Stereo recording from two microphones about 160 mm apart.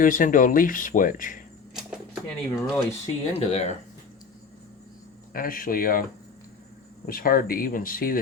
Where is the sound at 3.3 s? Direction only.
45° left (ahead or behind).